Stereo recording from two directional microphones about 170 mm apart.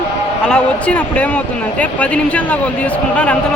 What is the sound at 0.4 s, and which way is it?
Speech, 5° left (ahead or behind).